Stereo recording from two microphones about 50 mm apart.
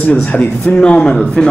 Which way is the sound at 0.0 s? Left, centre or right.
Left.